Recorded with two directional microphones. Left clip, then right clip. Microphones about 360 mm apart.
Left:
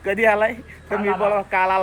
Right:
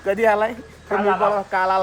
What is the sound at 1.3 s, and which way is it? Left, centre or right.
Speech, centre.